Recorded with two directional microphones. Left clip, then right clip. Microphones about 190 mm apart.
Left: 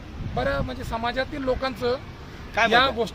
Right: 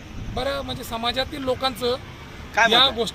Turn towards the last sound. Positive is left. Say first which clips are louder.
# right 2 dB
turn(degrees=0)  # may be behind; listen again after turning